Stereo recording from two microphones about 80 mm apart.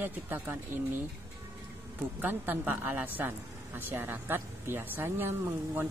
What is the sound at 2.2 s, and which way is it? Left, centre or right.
A woman's voice, right.